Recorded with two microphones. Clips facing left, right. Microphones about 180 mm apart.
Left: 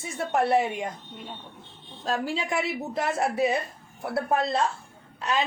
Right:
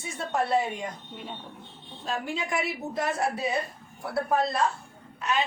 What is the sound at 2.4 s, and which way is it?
A woman's voice, 25° left (ahead or behind).